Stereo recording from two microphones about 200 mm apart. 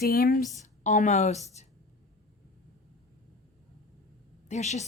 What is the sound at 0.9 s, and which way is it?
Speech, 35° left (ahead or behind).